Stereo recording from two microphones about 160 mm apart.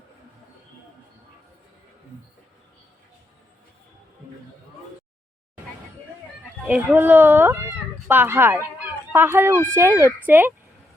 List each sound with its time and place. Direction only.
6.7 s speech: 10° right (ahead or behind)